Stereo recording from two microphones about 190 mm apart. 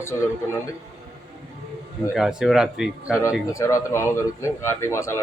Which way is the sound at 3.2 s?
15° left (ahead or behind).